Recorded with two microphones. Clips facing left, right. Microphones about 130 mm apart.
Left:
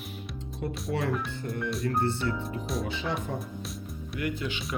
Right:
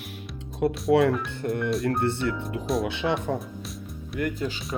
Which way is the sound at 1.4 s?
60° right (ahead or behind).